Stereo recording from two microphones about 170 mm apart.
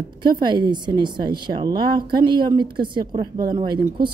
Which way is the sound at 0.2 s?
25° right (ahead or behind).